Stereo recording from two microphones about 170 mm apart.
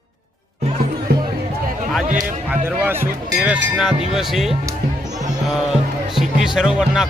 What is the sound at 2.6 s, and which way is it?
Speech, 10° right (ahead or behind).